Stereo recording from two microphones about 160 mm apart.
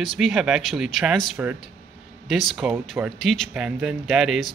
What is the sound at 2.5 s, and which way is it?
Speech, centre (ahead or behind).